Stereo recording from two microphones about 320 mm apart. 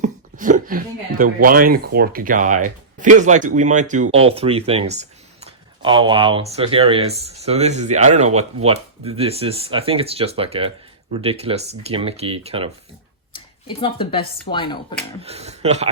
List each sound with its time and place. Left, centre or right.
0.0 s speech: right
13.3 s speech: centre
15.2 s speech: centre